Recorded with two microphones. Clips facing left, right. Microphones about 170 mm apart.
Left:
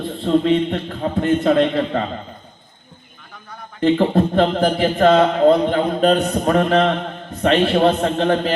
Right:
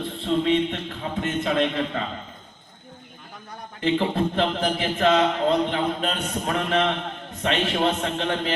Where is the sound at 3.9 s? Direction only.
40° left (ahead or behind).